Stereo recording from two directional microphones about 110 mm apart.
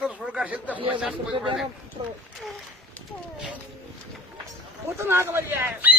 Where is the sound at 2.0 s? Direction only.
60° right (ahead or behind).